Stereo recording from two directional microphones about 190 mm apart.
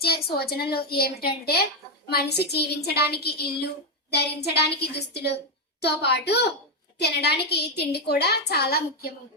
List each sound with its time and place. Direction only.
0.0 s a woman's voice: 55° left (ahead or behind)